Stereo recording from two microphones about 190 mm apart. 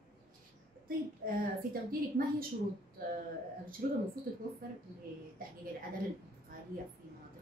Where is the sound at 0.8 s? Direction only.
50° right (ahead or behind).